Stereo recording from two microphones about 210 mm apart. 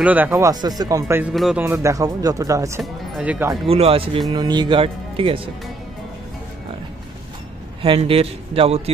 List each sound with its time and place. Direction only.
0.0 s speech: 10° right (ahead or behind)
3.6 s speech: 30° right (ahead or behind)
7.8 s speech: 25° right (ahead or behind)